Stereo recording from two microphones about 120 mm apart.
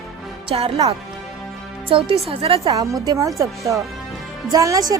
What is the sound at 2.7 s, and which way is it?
Speech, 30° right (ahead or behind).